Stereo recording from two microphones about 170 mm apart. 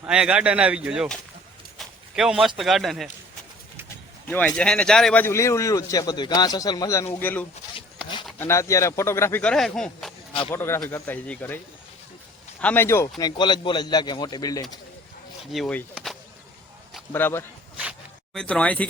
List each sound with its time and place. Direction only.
0.0 s speech: 5° right (ahead or behind)
1.8 s a sound: centre (ahead or behind)
2.6 s speech: centre (ahead or behind)
4.3 s speech: 10° left (ahead or behind)
10.5 s a man's voice: 15° left (ahead or behind)
15.5 s speech: centre (ahead or behind)
17.1 s speech: 15° left (ahead or behind)